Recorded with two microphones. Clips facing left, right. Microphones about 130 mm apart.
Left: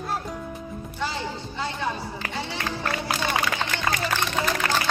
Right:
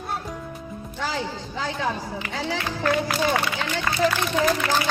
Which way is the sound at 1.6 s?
90° right.